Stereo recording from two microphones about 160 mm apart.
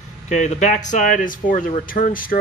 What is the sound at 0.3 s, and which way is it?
Speech, 50° left (ahead or behind).